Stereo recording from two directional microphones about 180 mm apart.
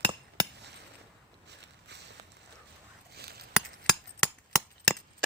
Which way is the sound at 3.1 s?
60° right (ahead or behind).